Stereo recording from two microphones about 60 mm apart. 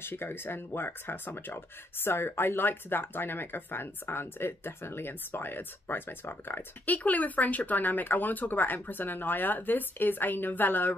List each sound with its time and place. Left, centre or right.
0.0 s speech: left
6.9 s speech: left